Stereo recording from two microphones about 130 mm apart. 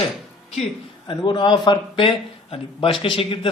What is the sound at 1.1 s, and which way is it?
A man's voice, 40° left (ahead or behind).